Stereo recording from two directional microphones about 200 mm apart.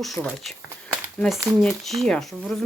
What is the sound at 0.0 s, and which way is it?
Speech, centre (ahead or behind).